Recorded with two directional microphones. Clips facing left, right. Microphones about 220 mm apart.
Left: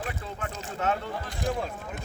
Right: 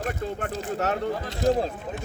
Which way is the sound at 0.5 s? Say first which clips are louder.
Even; 40° right (ahead or behind).